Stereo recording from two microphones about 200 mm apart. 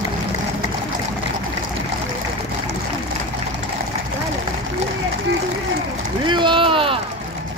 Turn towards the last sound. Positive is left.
turn(degrees=-25)  # may be behind; listen again after turning